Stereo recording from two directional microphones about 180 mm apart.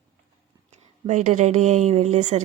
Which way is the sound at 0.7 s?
40° right (ahead or behind).